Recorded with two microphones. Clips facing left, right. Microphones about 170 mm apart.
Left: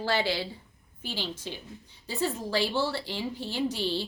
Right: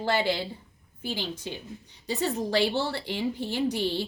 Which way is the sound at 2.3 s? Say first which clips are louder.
Right 4 dB; 70° right (ahead or behind).